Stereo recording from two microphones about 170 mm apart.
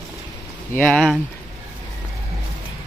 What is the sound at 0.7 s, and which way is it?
Speech, 10° left (ahead or behind).